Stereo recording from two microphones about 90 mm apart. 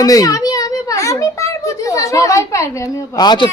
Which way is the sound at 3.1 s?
50° left (ahead or behind).